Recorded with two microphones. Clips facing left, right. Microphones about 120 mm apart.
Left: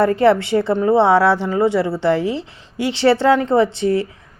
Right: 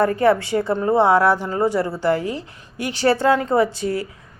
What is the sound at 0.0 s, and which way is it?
Speech, 25° left (ahead or behind).